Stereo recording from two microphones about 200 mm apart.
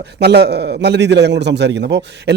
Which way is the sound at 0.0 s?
55° right (ahead or behind).